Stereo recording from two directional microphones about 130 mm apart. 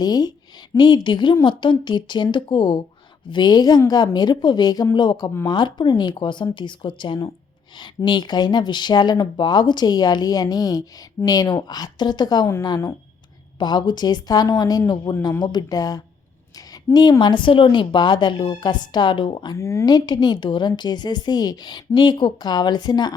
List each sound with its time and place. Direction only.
0.0 s speech: 30° left (ahead or behind)
19.5 s speech: 20° left (ahead or behind)
19.8 s speech: 30° left (ahead or behind)